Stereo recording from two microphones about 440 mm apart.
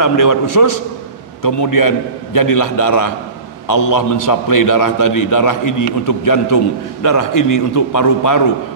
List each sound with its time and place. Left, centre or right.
0.0 s a man's voice: left